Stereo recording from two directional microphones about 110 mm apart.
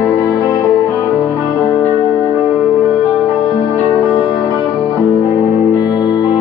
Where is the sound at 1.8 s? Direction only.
10° left (ahead or behind).